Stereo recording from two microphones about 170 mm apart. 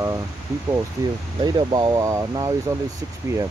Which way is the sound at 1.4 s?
25° right (ahead or behind).